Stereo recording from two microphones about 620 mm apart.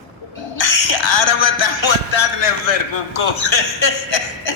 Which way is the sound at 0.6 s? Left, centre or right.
Left.